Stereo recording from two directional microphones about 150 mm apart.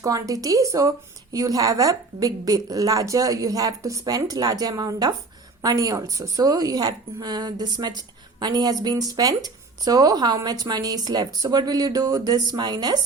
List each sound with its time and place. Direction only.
0.0 s a woman's voice: 25° right (ahead or behind)